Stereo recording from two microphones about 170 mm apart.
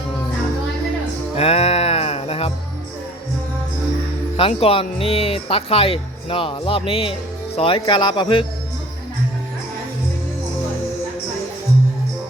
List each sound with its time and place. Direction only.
1.4 s music: 35° left (ahead or behind)
4.4 s speech: 35° left (ahead or behind)